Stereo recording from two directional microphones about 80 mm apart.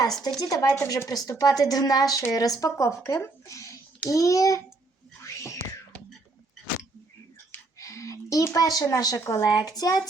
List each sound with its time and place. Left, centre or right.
0.1 s speech: centre
0.3 s a child's voice: left
5.2 s whispering: left
7.5 s a sound: left
8.5 s a child's voice: left